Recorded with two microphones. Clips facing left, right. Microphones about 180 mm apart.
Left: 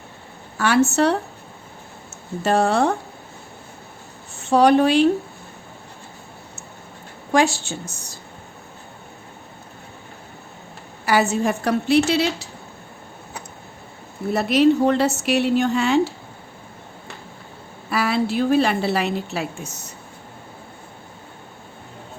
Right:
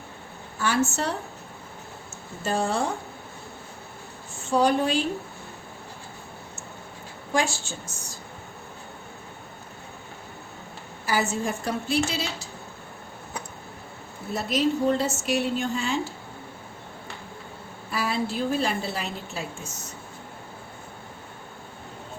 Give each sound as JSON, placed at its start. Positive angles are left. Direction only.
{"t": 0.5, "sound": "a woman's voice", "side_deg": 70}
{"t": 2.4, "sound": "a woman's voice", "side_deg": 70}
{"t": 4.4, "sound": "a woman's voice", "side_deg": 70}
{"t": 7.3, "sound": "a woman's voice", "side_deg": 70}
{"t": 11.0, "sound": "a woman's voice", "side_deg": 70}
{"t": 14.3, "sound": "a woman's voice", "side_deg": 70}
{"t": 17.8, "sound": "a woman's voice", "side_deg": 70}